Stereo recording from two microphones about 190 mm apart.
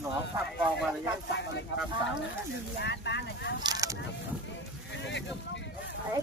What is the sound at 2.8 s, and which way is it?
Speech, 65° left (ahead or behind).